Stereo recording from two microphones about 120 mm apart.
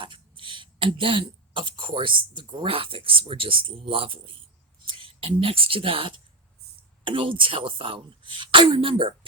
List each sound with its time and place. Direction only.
0.0 s speech: 45° right (ahead or behind)